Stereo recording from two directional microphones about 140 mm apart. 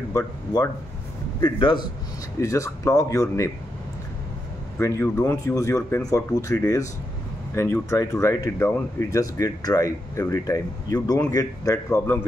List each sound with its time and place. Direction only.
0.1 s speech: 25° left (ahead or behind)
1.4 s a man's voice: 35° left (ahead or behind)
2.4 s speech: 20° left (ahead or behind)
4.7 s speech: 20° left (ahead or behind)